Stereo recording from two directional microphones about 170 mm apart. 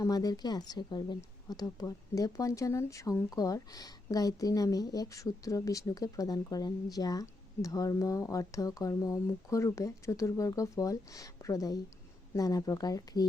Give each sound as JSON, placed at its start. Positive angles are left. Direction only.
{"t": 0.0, "sound": "speech", "side_deg": 20}